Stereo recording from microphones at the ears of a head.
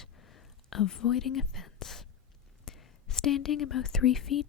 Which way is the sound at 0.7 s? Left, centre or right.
Left.